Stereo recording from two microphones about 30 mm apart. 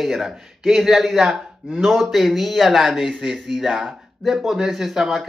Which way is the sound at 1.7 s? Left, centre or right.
Centre.